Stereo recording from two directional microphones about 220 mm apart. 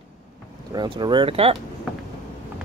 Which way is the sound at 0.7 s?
20° right (ahead or behind).